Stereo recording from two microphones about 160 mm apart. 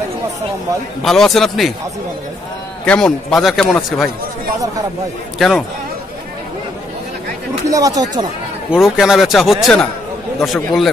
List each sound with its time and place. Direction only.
1.0 s a man's voice: centre (ahead or behind)
2.8 s a man's voice: 5° left (ahead or behind)
7.6 s speech: 20° right (ahead or behind)
8.7 s a man's voice: 5° right (ahead or behind)